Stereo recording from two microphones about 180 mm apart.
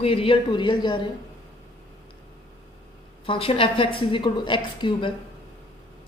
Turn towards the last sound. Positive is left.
turn(degrees=25)  # may be behind; listen again after turning